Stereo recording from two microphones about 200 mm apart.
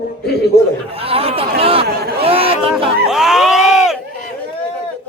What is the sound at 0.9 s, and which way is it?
Speech, 30° right (ahead or behind).